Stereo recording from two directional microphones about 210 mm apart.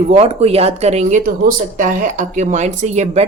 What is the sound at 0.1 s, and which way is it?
Speech, 30° right (ahead or behind).